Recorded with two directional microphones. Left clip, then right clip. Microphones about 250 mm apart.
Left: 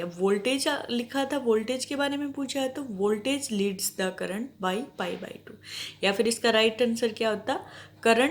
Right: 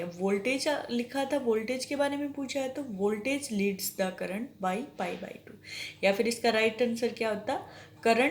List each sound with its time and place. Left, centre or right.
0.0 s speech: left